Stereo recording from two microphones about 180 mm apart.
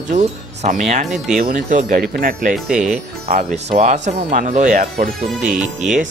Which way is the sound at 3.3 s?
40° right (ahead or behind).